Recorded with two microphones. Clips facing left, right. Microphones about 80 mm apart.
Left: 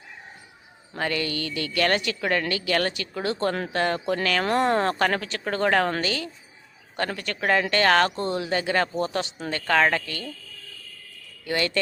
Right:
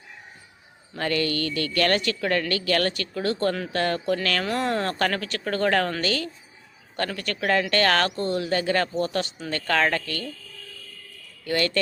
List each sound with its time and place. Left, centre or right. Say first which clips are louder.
0.9 s speech: right 2 dB; centre
11.4 s speech: right 1 dB; centre